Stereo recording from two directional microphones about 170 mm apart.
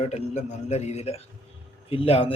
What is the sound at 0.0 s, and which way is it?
A man's voice, 40° left (ahead or behind).